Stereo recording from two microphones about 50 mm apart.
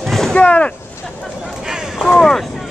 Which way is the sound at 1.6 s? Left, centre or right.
Centre.